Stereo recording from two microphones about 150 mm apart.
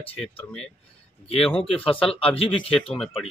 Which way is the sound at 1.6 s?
35° left (ahead or behind).